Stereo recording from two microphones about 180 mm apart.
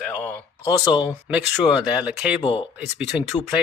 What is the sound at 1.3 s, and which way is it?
Speech, 5° right (ahead or behind).